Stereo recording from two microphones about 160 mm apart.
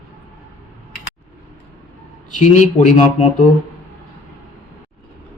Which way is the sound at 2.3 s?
50° left (ahead or behind).